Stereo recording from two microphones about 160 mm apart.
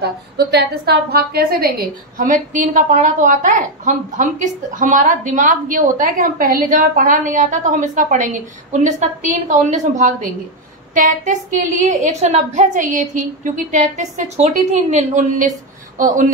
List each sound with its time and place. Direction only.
0.0 s a woman's voice: 90° right; by 15.5 s 50° right (ahead or behind)